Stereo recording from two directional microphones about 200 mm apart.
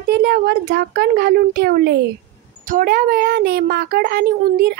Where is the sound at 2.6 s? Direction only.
40° right (ahead or behind).